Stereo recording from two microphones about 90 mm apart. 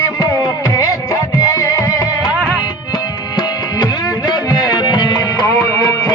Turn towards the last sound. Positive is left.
turn(degrees=50)  # may be behind; listen again after turning